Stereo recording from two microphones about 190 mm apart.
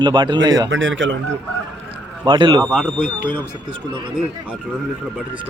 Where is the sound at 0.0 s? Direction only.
25° right (ahead or behind).